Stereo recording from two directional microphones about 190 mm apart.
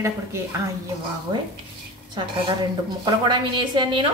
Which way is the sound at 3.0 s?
25° right (ahead or behind).